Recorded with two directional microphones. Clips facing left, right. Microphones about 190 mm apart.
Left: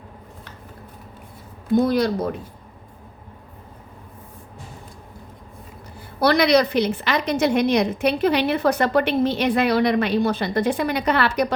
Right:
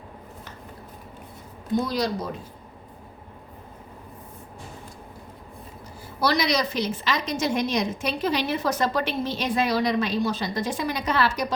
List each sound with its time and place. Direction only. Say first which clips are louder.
1.8 s a woman's voice: left 9 dB; 55° left (ahead or behind)
6.1 s a woman's voice: left 7 dB; 60° left (ahead or behind)